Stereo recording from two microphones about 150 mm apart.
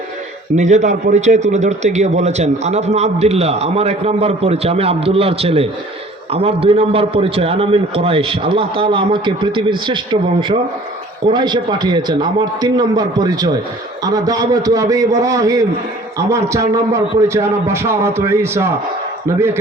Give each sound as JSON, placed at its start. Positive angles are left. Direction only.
{"t": 0.5, "sound": "a man's voice", "side_deg": -50}